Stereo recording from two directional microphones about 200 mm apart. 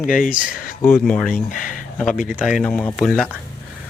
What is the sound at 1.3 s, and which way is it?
Speech, 40° left (ahead or behind).